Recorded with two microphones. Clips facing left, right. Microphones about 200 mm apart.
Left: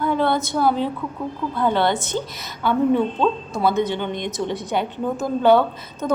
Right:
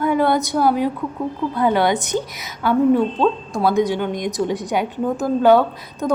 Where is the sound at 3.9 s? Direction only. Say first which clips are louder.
Right 3 dB; 10° right (ahead or behind).